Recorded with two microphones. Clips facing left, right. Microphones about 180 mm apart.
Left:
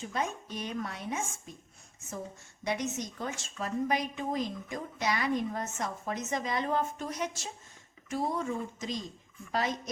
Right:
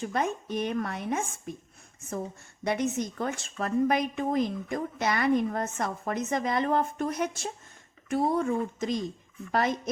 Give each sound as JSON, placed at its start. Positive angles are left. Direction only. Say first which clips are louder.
{"t": 0.0, "sound": "a woman's voice", "louder": "right 5 dB", "side_deg": -60}
{"t": 2.6, "sound": "a woman's voice", "louder": "right 5 dB", "side_deg": -55}